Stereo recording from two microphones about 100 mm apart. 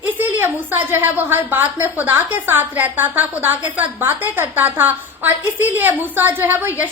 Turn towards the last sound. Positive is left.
turn(degrees=-20)  # may be behind; listen again after turning